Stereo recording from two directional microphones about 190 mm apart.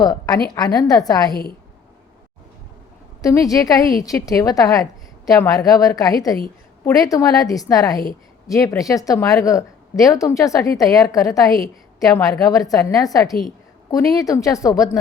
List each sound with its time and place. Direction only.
0.0 s a woman's voice: 20° left (ahead or behind)
3.2 s a woman's voice: 15° left (ahead or behind)